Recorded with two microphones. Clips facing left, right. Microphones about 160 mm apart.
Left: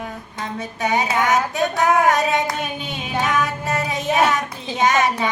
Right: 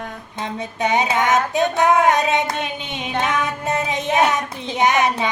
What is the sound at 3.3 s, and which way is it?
Child singing, 20° right (ahead or behind).